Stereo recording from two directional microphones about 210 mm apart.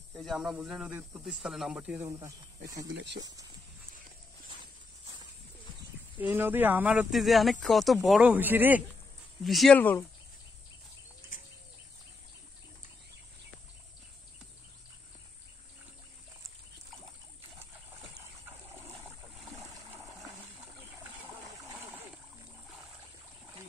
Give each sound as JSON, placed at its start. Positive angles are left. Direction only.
{"t": 0.1, "sound": "speech", "side_deg": 0}
{"t": 2.9, "sound": "speech", "side_deg": -60}
{"t": 6.1, "sound": "speech", "side_deg": -10}
{"t": 21.0, "sound": "splash", "side_deg": -10}